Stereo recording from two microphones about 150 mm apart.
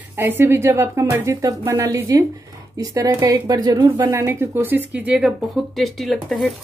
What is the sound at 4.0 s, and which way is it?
Speech, 15° right (ahead or behind).